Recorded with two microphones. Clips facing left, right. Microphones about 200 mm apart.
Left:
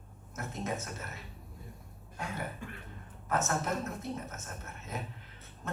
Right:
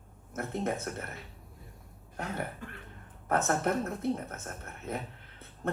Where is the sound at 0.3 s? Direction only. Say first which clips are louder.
Right 4 dB; 60° right (ahead or behind).